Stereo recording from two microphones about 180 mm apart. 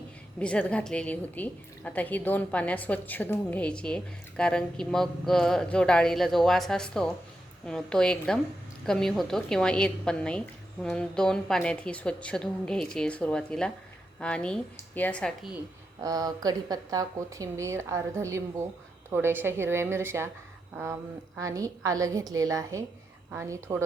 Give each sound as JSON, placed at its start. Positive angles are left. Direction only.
{"t": 0.3, "sound": "a woman's voice", "side_deg": 5}
{"t": 16.0, "sound": "speech", "side_deg": -20}